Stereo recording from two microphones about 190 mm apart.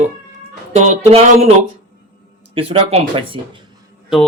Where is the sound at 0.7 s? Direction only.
35° right (ahead or behind).